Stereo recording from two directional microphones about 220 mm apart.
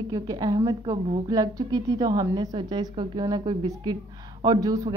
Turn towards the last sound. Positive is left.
turn(degrees=-15)  # may be behind; listen again after turning